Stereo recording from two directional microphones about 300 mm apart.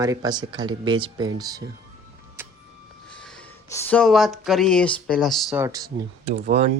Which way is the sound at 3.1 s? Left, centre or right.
Centre.